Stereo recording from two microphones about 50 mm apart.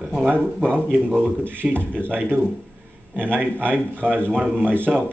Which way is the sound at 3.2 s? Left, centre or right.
Right.